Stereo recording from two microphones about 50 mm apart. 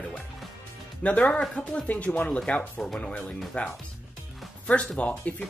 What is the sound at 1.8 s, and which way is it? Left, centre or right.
Speech, left.